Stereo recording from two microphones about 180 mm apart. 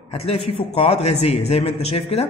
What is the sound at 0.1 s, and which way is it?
A man's voice, 35° left (ahead or behind).